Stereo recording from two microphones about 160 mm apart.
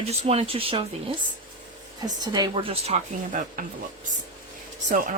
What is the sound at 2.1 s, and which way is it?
A woman's voice, 25° right (ahead or behind).